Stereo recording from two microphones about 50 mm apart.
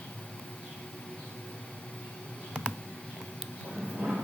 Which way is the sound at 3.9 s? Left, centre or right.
Centre.